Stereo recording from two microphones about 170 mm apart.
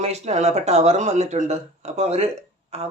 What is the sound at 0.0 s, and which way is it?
Speech, 40° right (ahead or behind).